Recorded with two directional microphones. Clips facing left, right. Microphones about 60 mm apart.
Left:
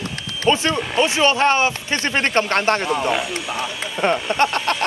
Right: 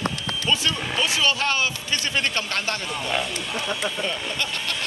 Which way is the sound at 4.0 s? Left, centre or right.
Left.